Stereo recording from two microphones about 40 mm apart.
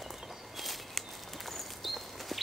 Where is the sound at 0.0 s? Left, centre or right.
Centre.